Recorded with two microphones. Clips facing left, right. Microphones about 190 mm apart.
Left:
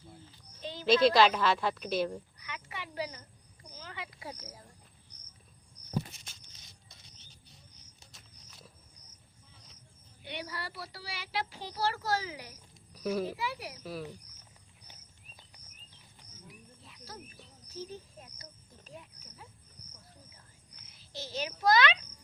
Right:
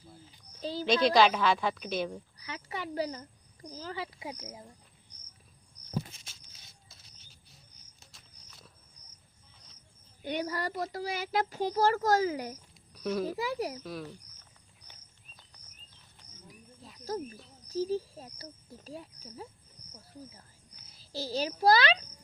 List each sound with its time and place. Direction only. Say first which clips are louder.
0.6 s speech: right 7 dB; 35° right (ahead or behind)
0.9 s speech: left 1 dB; centre (ahead or behind)
2.5 s a sound: right 6 dB; 40° right (ahead or behind)
4.2 s speech: right 3 dB; 15° right (ahead or behind)
6.1 s patter: left 1 dB; 5° right (ahead or behind)
7.9 s walk: right 1 dB; centre (ahead or behind)
10.2 s a child's voice: right 8 dB; 45° right (ahead or behind)
12.9 s a sound: right 1 dB; 5° left (ahead or behind)
13.3 s speech: right 6 dB; 40° right (ahead or behind)
13.8 s speech: even; 5° left (ahead or behind)
16.5 s cricket: right 4 dB; 40° right (ahead or behind)
17.7 s speech: right 12 dB; 35° right (ahead or behind)
20.8 s a child's voice: right 7 dB; 35° right (ahead or behind)